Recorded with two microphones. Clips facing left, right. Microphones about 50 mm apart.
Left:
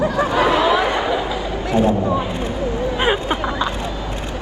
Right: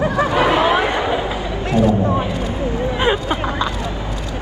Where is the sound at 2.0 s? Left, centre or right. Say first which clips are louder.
Right 1 dB; right.